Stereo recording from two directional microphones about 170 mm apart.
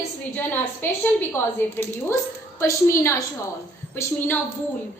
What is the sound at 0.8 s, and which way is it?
A woman's voice, 10° left (ahead or behind).